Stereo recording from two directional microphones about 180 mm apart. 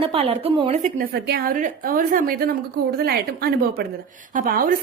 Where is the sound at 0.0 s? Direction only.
30° right (ahead or behind).